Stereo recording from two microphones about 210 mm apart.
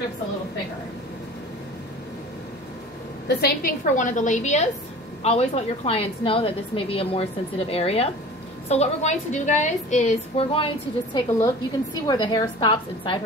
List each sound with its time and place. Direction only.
3.3 s a woman's voice: 45° left (ahead or behind); by 13.2 s 25° left (ahead or behind)